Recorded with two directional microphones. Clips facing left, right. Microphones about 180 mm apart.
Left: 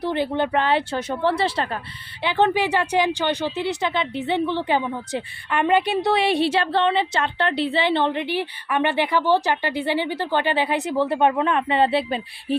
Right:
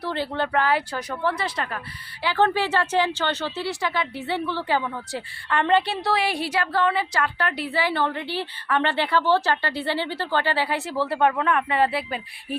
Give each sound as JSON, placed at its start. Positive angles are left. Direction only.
{"t": 0.0, "sound": "a woman's voice", "side_deg": 15}
{"t": 2.2, "sound": "a woman's voice", "side_deg": 20}